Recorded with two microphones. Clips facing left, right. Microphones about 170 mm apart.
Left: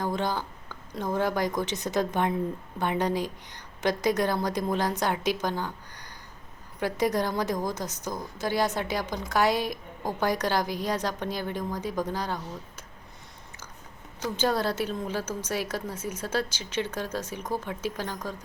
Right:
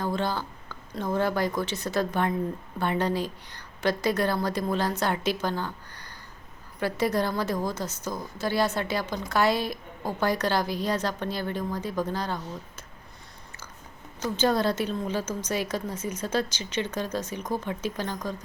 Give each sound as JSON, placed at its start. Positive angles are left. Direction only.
{"t": 0.0, "sound": "a woman's voice", "side_deg": 15}
{"t": 14.2, "sound": "a woman's voice", "side_deg": 10}